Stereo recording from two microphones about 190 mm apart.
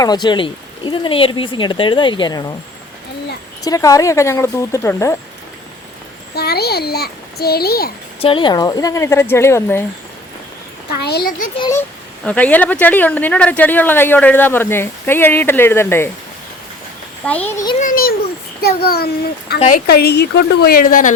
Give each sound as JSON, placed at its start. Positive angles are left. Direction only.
{"t": 0.0, "sound": "speech", "side_deg": 20}
{"t": 3.6, "sound": "speech", "side_deg": 20}
{"t": 6.3, "sound": "a child's voice", "side_deg": 55}
{"t": 8.2, "sound": "speech", "side_deg": 30}
{"t": 11.0, "sound": "a child's voice", "side_deg": 55}
{"t": 11.7, "sound": "speech", "side_deg": 10}
{"t": 17.2, "sound": "speech", "side_deg": 10}
{"t": 17.7, "sound": "a child's voice", "side_deg": 45}